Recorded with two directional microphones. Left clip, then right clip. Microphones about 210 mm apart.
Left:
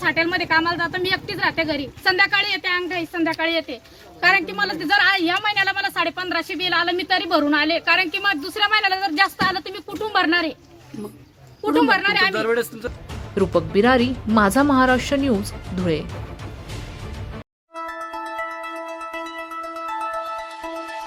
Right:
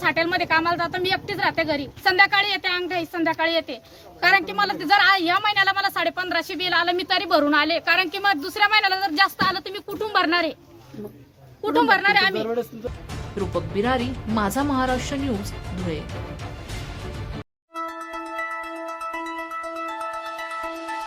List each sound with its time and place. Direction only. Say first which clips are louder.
0.0 s a woman's voice: left 1 dB; 10° right (ahead or behind)
11.6 s a woman's voice: left 1 dB; 10° right (ahead or behind)
12.4 s a woman's voice: left 5 dB; 25° left (ahead or behind)
17.7 s music: left 1 dB; centre (ahead or behind)